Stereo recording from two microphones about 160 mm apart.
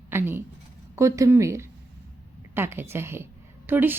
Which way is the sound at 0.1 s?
15° right (ahead or behind).